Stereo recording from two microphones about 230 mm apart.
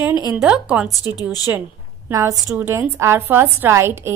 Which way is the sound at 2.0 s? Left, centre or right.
Centre.